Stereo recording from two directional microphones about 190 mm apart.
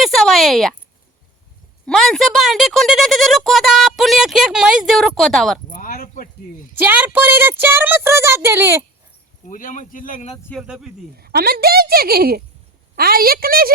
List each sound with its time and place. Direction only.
0.0 s a sound: centre (ahead or behind)
1.9 s speech: centre (ahead or behind)
5.7 s a sound: 45° left (ahead or behind)
6.7 s a child's voice: 10° right (ahead or behind)
9.5 s speech: 45° left (ahead or behind)
10.5 s speech: 5° right (ahead or behind)
11.2 s a woman's voice: 55° right (ahead or behind)